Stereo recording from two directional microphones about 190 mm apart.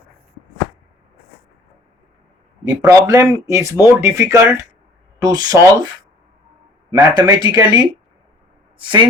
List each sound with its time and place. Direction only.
2.6 s speech: 20° right (ahead or behind)
6.9 s speech: 20° right (ahead or behind)